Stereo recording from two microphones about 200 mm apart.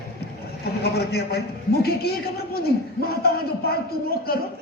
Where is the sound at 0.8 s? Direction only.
55° left (ahead or behind).